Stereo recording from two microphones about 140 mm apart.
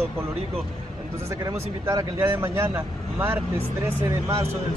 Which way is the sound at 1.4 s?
25° right (ahead or behind).